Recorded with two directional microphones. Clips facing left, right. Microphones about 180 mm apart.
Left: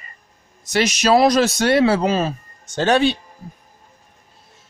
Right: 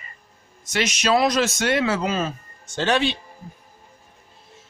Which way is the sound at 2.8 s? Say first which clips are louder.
Left 5 dB; 45° left (ahead or behind).